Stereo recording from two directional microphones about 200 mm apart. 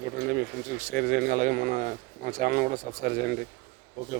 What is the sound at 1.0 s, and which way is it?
Speech, 45° right (ahead or behind).